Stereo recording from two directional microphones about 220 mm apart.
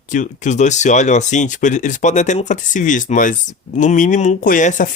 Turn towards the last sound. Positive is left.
turn(degrees=35)  # may be behind; listen again after turning